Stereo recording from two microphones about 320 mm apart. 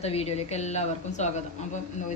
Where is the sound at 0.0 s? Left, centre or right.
Centre.